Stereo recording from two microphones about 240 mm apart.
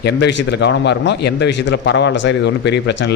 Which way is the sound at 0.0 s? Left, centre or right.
Left.